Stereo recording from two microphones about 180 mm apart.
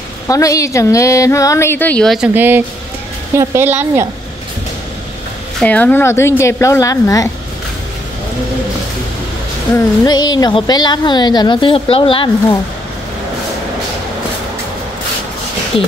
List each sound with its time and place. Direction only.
0.3 s a woman's voice: 20° left (ahead or behind); by 4.1 s 15° right (ahead or behind)
5.6 s speech: 10° left (ahead or behind)
9.8 s a woman's voice: 20° left (ahead or behind)
15.7 s speech: 30° left (ahead or behind)